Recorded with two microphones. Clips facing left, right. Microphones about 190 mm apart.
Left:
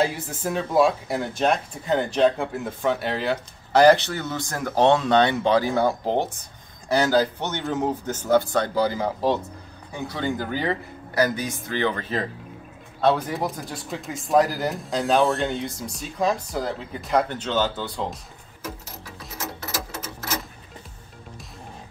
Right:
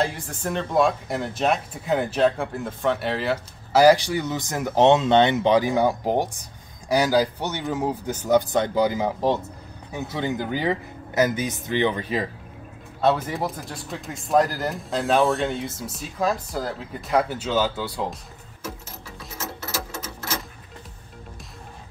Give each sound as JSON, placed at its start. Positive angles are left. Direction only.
{"t": 0.0, "sound": "speech", "side_deg": 5}
{"t": 13.0, "sound": "speech", "side_deg": 0}